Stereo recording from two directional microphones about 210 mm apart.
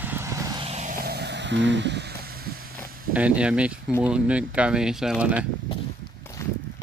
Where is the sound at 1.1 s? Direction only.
50° right (ahead or behind).